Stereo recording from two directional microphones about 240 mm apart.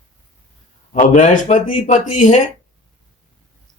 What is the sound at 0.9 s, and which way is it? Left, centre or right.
A man's voice, left.